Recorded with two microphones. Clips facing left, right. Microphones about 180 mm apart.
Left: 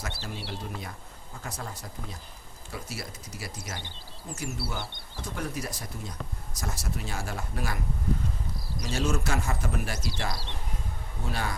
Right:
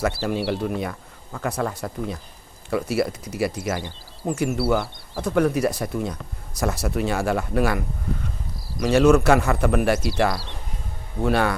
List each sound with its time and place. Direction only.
0.2 s speech: 80° right
8.8 s speech: 65° right (ahead or behind)